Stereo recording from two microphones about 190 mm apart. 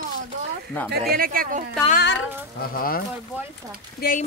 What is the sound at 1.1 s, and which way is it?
Speech, 50° right (ahead or behind).